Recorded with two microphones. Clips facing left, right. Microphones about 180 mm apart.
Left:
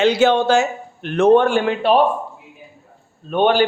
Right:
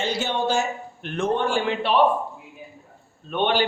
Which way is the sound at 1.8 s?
45° left (ahead or behind).